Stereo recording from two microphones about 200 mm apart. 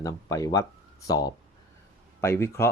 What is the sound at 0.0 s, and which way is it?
Speech, 15° left (ahead or behind).